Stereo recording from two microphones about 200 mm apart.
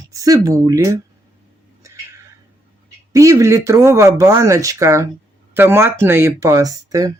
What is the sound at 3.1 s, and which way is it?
Speech, 15° right (ahead or behind).